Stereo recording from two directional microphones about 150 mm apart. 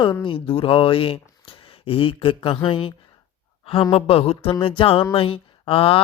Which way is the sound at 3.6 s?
35° left (ahead or behind).